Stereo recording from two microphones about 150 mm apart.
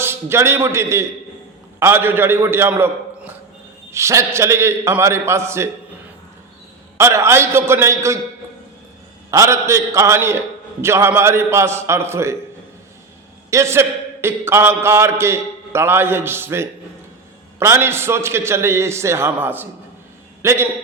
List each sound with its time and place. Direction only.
0.0 s a man's voice: 15° right (ahead or behind)
6.9 s a man's voice: 20° right (ahead or behind)
9.3 s a man's voice: 20° right (ahead or behind)
13.5 s a man's voice: 20° right (ahead or behind)